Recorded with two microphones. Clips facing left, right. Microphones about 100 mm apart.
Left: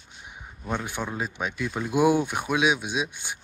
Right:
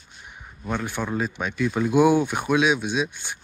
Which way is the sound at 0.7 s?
15° left (ahead or behind).